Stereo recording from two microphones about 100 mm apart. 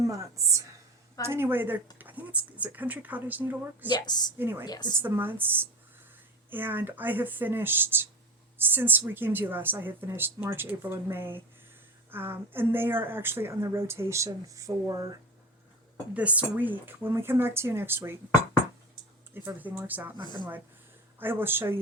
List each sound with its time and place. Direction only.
0.0 s a woman's voice: 35° right (ahead or behind)
1.3 s speech: 20° right (ahead or behind)
3.8 s a woman's voice: 45° left (ahead or behind)
4.4 s speech: 20° right (ahead or behind)
4.6 s a woman's voice: 45° left (ahead or behind)
5.0 s speech: 20° right (ahead or behind)
16.1 s speech: 15° right (ahead or behind)
19.3 s speech: 20° right (ahead or behind)
21.2 s speech: 20° right (ahead or behind)